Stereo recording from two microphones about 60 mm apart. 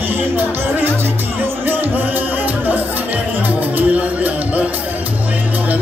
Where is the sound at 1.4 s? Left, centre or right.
Right.